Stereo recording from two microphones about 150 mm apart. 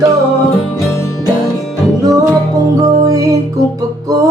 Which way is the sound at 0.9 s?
20° left (ahead or behind).